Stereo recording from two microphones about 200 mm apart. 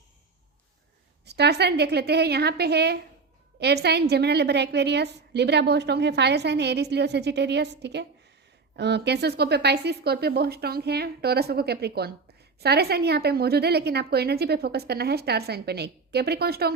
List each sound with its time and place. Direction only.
1.2 s a woman's voice: 55° right (ahead or behind)